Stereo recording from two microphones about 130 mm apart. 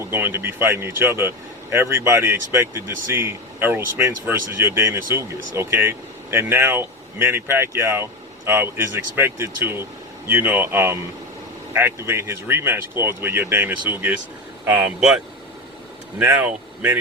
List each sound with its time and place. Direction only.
0.0 s speech: 20° right (ahead or behind)